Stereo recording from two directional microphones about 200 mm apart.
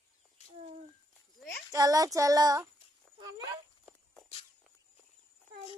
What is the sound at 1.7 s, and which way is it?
Child singing, 15° right (ahead or behind).